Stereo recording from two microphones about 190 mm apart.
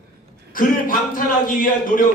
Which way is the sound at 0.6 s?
45° left (ahead or behind).